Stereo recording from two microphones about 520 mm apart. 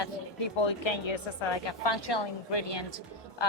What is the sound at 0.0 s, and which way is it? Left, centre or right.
A woman's voice, left.